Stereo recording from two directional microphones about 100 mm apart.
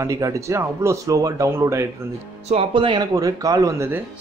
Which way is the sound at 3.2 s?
35° right (ahead or behind).